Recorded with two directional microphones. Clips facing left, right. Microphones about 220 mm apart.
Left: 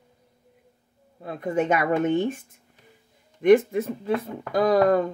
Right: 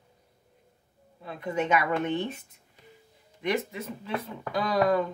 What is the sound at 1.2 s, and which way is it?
Speech, 50° left (ahead or behind).